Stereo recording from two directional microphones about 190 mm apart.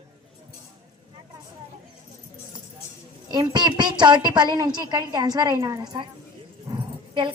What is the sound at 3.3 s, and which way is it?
A woman's voice, 25° right (ahead or behind).